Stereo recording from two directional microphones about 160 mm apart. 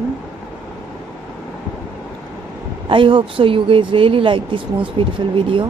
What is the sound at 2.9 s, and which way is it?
Speech, 30° right (ahead or behind).